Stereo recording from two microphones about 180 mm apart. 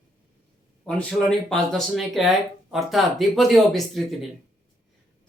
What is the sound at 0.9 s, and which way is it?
Speech, 5° left (ahead or behind).